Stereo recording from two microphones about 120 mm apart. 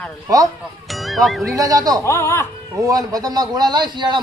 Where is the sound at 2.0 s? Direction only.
20° left (ahead or behind).